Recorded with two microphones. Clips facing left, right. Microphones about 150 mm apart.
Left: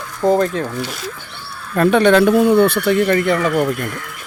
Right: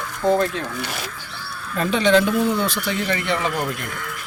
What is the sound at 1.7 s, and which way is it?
Speech, 60° left (ahead or behind).